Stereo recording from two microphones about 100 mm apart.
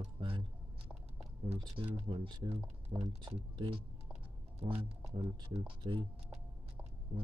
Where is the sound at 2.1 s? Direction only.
50° right (ahead or behind).